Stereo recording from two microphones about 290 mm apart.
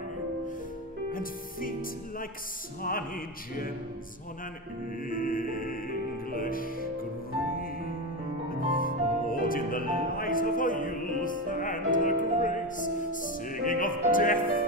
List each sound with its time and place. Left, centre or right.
1.1 s music: left
5.1 s music: left
8.5 s speech: left